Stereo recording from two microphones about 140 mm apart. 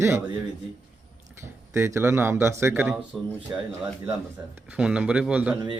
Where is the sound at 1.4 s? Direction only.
20° right (ahead or behind).